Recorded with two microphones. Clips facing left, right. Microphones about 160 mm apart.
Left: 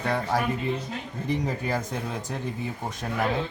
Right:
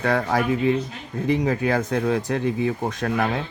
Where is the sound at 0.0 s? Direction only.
75° right (ahead or behind).